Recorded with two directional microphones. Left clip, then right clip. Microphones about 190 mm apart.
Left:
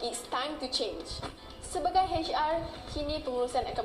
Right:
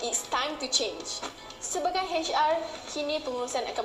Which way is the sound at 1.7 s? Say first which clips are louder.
Left 1 dB; 15° right (ahead or behind).